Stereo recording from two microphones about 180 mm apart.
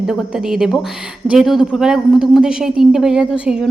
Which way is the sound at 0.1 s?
5° right (ahead or behind).